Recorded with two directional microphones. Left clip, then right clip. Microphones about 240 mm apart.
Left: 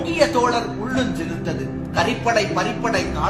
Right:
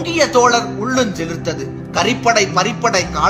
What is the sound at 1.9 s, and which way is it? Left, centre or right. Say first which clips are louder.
Speech: right 5 dB; right.